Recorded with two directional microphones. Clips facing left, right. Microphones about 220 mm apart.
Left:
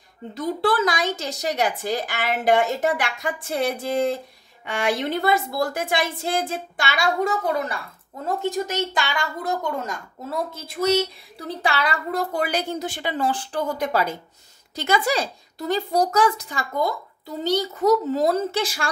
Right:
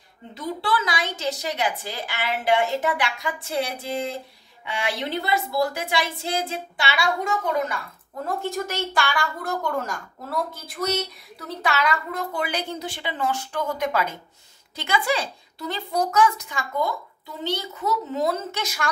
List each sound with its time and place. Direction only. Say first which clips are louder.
0.3 s speech: left 4 dB; 45° left (ahead or behind)
8.4 s speech: left 5 dB; 20° left (ahead or behind)